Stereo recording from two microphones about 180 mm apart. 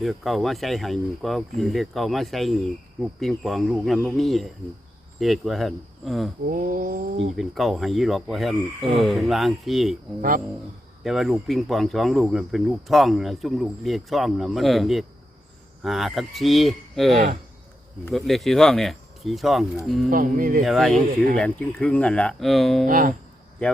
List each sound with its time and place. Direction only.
0.0 s speech: centre (ahead or behind)
6.4 s cat: 50° right (ahead or behind)
7.3 s speech: centre (ahead or behind)
10.2 s cat: 50° right (ahead or behind)
11.0 s speech: centre (ahead or behind)
20.1 s cat: 50° right (ahead or behind)
20.7 s speech: centre (ahead or behind)
22.9 s cat: 50° right (ahead or behind)
23.6 s speech: 5° left (ahead or behind)